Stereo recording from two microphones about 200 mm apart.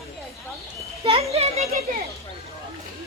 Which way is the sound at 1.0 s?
30° right (ahead or behind).